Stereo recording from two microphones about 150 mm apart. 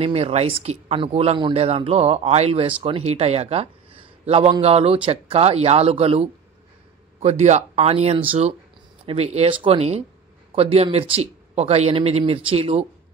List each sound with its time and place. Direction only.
0.0 s speech: 40° right (ahead or behind)